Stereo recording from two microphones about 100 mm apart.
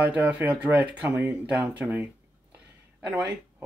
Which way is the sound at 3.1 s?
15° right (ahead or behind).